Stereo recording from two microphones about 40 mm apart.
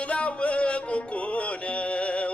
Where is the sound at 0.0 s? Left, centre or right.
Left.